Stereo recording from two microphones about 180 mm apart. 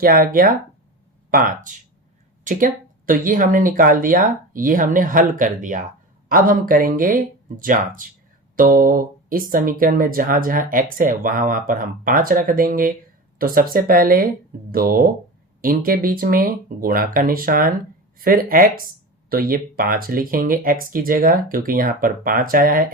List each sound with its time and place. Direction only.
0.0 s speech: 50° right (ahead or behind)